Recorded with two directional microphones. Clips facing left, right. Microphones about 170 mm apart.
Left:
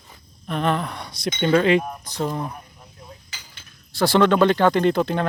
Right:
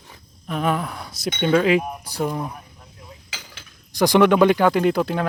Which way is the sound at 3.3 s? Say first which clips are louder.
Right 5 dB; 90° right.